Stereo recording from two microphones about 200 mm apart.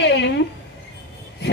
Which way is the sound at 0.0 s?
60° left (ahead or behind).